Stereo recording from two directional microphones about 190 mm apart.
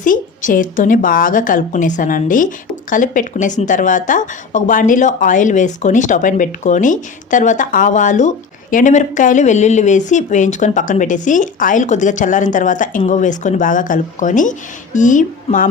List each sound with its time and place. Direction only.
0.0 s a woman's voice: 45° left (ahead or behind)